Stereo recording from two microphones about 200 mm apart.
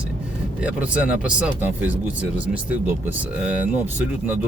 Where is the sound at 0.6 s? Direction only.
5° right (ahead or behind).